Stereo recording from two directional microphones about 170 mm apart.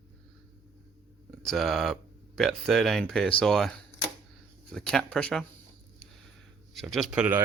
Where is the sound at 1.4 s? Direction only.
Centre (ahead or behind).